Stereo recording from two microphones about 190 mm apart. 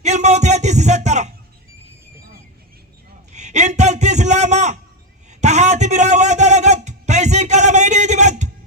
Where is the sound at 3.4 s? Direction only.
40° right (ahead or behind).